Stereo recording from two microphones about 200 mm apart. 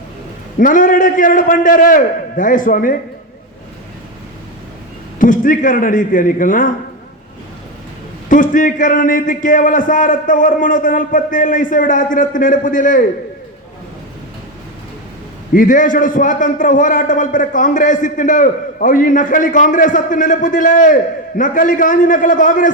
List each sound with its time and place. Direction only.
0.6 s a man's voice: 40° left (ahead or behind)
5.2 s a man's voice: 40° left (ahead or behind)
8.3 s a man's voice: 40° left (ahead or behind)
15.5 s a man's voice: 40° left (ahead or behind)